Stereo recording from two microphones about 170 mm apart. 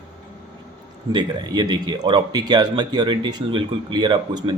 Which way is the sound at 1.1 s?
25° right (ahead or behind).